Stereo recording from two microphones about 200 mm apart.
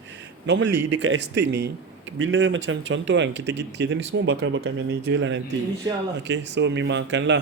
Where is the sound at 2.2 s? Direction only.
70° right (ahead or behind).